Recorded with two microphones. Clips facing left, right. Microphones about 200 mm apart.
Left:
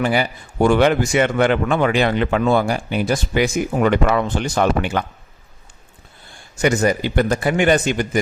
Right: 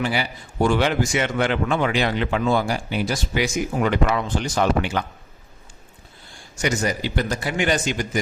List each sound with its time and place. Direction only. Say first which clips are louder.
0.0 s speech: left 5 dB; 50° left (ahead or behind)
6.6 s speech: left 6 dB; 55° left (ahead or behind)